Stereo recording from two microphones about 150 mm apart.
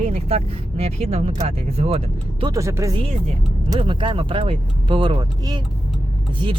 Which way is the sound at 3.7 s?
35° right (ahead or behind).